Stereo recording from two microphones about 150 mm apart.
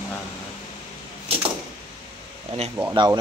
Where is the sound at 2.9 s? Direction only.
30° right (ahead or behind).